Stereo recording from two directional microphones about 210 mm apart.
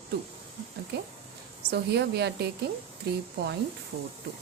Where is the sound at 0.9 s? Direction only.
50° right (ahead or behind).